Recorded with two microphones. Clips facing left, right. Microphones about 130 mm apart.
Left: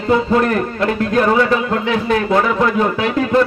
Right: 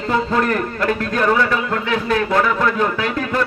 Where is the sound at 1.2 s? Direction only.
20° left (ahead or behind).